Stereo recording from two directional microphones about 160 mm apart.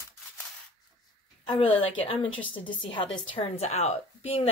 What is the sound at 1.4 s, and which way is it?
Speech, 35° left (ahead or behind).